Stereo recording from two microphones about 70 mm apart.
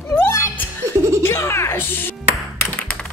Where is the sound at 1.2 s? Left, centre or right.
Left.